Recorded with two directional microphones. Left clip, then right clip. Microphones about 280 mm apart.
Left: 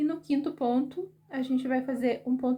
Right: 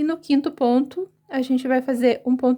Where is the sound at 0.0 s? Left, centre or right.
Right.